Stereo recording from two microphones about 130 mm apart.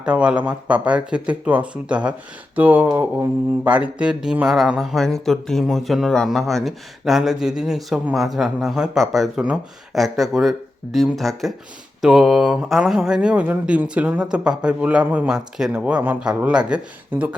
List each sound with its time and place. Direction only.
0.0 s speech: 10° right (ahead or behind)
3.0 s mantra: 15° right (ahead or behind)
12.0 s speech: 5° right (ahead or behind)